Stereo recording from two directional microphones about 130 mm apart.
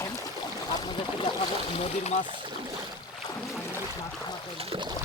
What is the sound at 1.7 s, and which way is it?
Speech, 55° left (ahead or behind).